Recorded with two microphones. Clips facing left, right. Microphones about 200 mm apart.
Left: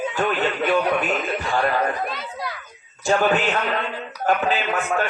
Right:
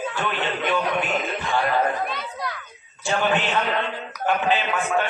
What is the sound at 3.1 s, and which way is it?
Music, 40° left (ahead or behind).